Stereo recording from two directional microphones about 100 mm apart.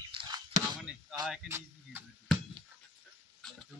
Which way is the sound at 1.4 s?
25° right (ahead or behind).